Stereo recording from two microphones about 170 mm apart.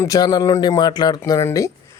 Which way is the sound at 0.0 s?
20° left (ahead or behind).